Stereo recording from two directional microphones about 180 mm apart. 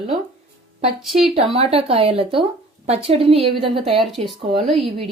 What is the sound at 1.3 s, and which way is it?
A woman's voice, 35° right (ahead or behind).